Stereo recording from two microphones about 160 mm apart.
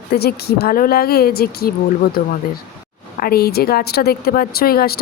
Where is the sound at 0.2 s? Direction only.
80° left.